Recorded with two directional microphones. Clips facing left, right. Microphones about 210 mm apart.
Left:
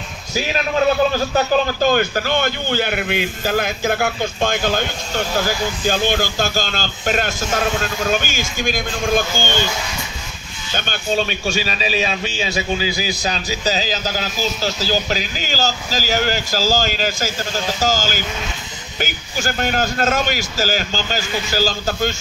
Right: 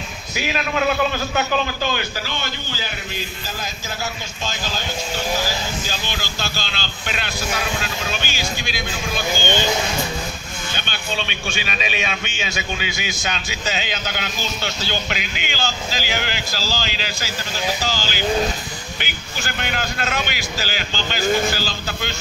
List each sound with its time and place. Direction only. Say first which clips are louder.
1.3 s a man's voice: left 5 dB; 45° left (ahead or behind)
5.9 s speech: left 10 dB; 50° left (ahead or behind)
10.7 s a man's voice: left 8 dB; 45° left (ahead or behind)
21.2 s a man's voice: right 5 dB; 45° right (ahead or behind)
21.5 s speech: left 7 dB; 45° left (ahead or behind)